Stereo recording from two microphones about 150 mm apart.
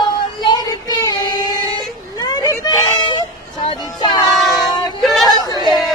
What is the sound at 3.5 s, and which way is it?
Music, 35° left (ahead or behind).